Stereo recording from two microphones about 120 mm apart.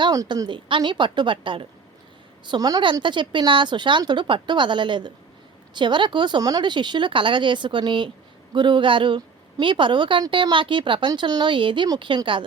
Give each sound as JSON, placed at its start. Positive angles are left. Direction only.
{"t": 0.0, "sound": "a woman's voice", "side_deg": -35}
{"t": 2.5, "sound": "a woman's voice", "side_deg": -35}